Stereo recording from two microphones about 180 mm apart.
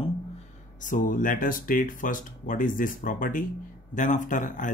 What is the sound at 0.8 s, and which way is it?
Speech, 45° left (ahead or behind).